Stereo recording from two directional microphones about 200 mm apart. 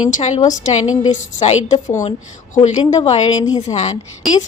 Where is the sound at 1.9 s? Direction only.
35° left (ahead or behind).